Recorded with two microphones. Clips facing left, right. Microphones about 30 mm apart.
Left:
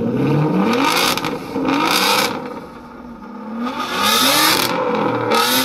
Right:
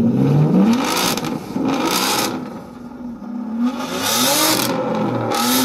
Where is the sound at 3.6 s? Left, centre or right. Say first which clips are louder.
Left 3 dB; left.